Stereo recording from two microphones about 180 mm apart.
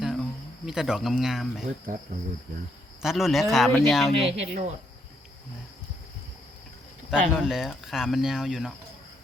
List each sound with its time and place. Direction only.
0.0 s cricket: centre (ahead or behind)
3.0 s speech: centre (ahead or behind)
4.2 s speech: 35° right (ahead or behind)
7.1 s speech: 5° right (ahead or behind)